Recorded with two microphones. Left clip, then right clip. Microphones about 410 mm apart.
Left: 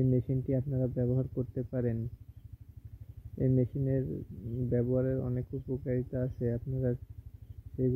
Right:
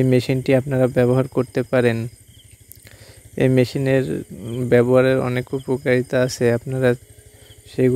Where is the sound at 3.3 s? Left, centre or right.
Right.